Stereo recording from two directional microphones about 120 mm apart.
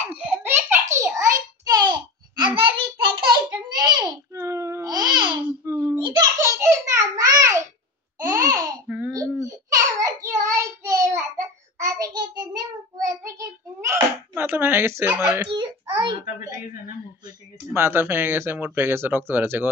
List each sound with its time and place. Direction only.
0.0 s a sound: 10° right (ahead or behind); by 4.2 s 40° right (ahead or behind)
4.3 s babbling: 25° right (ahead or behind)
5.7 s babbling: 15° right (ahead or behind)
5.9 s baby laughter: 40° right (ahead or behind)
6.4 s a sound: 25° right (ahead or behind)
8.2 s babbling: 30° right (ahead or behind)
8.8 s babbling: 10° right (ahead or behind)
9.1 s babbling: 30° right (ahead or behind)
10.0 s child singing: 25° right (ahead or behind)
16.0 s a sound: 30° right (ahead or behind)
17.7 s speech: 20° right (ahead or behind)